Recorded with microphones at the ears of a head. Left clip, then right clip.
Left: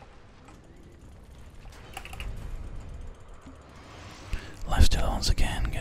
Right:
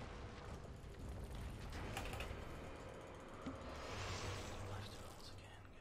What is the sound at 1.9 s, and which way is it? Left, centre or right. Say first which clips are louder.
Typing: left 8 dB; left.